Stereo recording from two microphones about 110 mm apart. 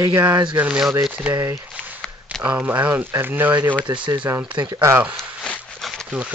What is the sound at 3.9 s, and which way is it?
Speech, 50° right (ahead or behind).